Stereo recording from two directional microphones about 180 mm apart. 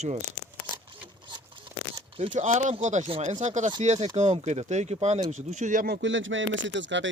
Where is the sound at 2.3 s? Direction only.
40° right (ahead or behind).